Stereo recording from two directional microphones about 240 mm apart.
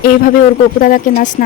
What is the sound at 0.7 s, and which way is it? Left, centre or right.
Speech, left.